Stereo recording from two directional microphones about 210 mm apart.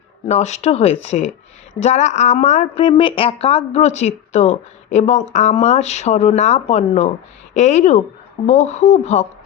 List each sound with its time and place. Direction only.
0.3 s a woman's voice: 35° left (ahead or behind)